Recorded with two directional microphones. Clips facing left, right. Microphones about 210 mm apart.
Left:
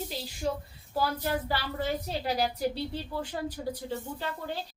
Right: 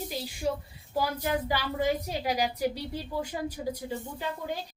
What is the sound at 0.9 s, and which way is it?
A woman's voice, 15° right (ahead or behind).